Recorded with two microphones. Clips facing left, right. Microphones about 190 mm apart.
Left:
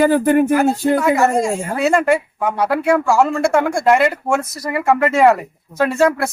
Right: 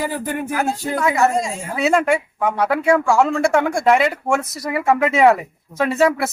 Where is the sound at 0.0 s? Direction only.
65° left (ahead or behind).